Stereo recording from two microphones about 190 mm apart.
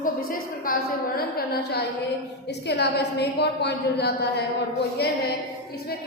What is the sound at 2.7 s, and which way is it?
A woman's voice, 60° left (ahead or behind).